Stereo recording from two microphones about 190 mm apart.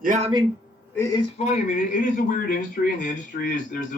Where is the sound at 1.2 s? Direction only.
35° left (ahead or behind).